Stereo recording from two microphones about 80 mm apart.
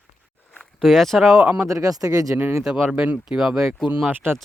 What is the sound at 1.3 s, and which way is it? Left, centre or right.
Speech, centre.